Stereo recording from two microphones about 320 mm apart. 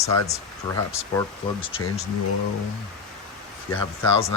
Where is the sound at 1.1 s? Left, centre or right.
Centre.